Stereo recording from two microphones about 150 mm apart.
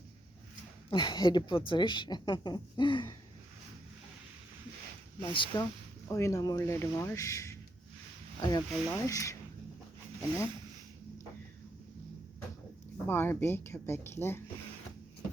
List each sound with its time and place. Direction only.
0.9 s a woman's voice: 30° left (ahead or behind)
5.2 s speech: 30° left (ahead or behind)
6.1 s speech: 20° left (ahead or behind)
13.1 s speech: 15° left (ahead or behind)